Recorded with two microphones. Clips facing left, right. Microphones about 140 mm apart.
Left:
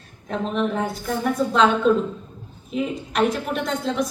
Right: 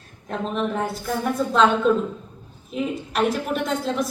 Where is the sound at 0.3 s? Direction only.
Centre (ahead or behind).